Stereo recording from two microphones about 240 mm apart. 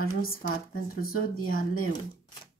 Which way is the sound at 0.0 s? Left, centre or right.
Left.